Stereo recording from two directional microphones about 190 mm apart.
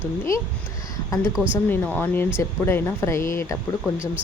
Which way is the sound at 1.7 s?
10° left (ahead or behind).